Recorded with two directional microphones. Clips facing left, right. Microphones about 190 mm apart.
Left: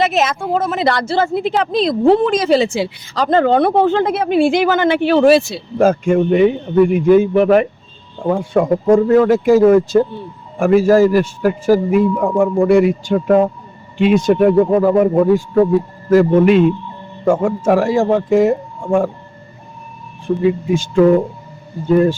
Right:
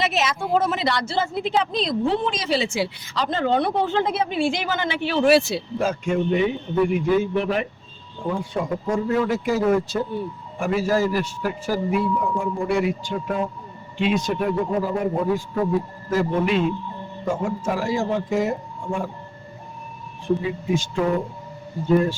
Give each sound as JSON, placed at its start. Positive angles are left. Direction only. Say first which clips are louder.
{"t": 0.0, "sound": "a man's voice", "louder": "left 7 dB", "side_deg": 45}
{"t": 5.4, "sound": "speech", "louder": "left 1 dB", "side_deg": -5}
{"t": 5.8, "sound": "a man's voice", "louder": "left 11 dB", "side_deg": 50}